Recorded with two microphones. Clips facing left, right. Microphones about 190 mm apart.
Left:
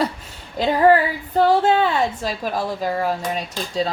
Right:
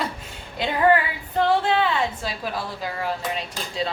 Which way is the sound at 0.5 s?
40° left (ahead or behind).